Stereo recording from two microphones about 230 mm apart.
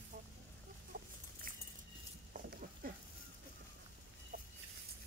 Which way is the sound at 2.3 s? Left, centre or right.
Right.